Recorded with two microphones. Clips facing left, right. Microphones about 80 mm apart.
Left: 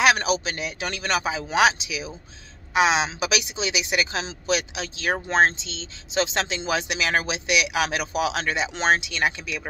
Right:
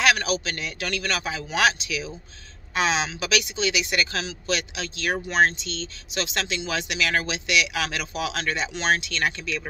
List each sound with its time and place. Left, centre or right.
0.0 s speech: left